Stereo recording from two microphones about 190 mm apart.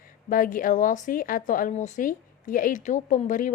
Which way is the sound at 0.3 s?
45° left (ahead or behind).